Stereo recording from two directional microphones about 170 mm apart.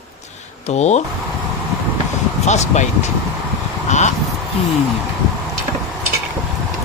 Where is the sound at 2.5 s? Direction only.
45° left (ahead or behind).